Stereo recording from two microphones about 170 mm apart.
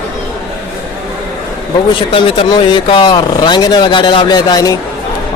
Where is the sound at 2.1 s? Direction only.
30° left (ahead or behind).